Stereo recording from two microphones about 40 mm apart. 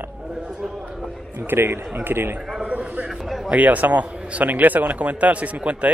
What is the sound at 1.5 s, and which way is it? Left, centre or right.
Speech, right.